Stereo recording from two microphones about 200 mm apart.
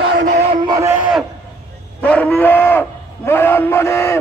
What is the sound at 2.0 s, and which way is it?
Speech, 5° left (ahead or behind).